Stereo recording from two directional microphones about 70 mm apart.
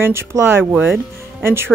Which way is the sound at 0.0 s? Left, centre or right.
Right.